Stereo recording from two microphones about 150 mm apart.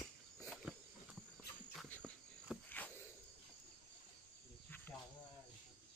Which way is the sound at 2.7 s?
10° left (ahead or behind).